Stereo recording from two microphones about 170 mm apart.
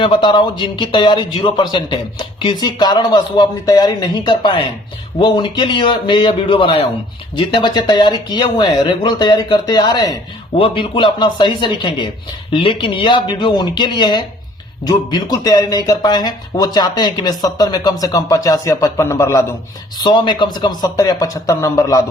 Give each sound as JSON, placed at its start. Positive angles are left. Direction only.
{"t": 0.0, "sound": "speech", "side_deg": 30}